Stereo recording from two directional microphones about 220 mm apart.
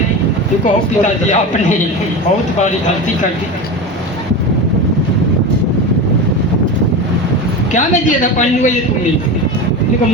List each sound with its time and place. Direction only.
0.6 s a man's voice: 35° left (ahead or behind)
7.7 s a man's voice: 35° left (ahead or behind)